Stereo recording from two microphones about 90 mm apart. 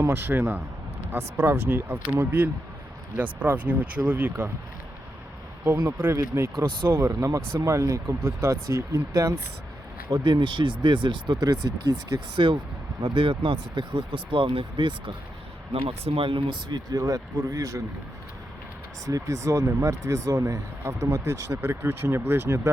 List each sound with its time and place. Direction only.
0.0 s speech: 30° right (ahead or behind)
5.6 s speech: 25° right (ahead or behind)
7.1 s speech: 40° right (ahead or behind)
10.1 s speech: 60° right (ahead or behind)
11.3 s speech: 40° right (ahead or behind)
13.0 s speech: 70° right (ahead or behind)
15.7 s speech: 85° right; by 17.8 s 35° right (ahead or behind)
19.0 s speech: 35° right (ahead or behind)
21.6 s speech: 25° right (ahead or behind)